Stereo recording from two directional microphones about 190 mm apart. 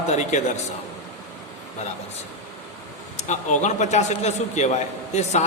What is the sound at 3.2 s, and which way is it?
Speech, 40° left (ahead or behind).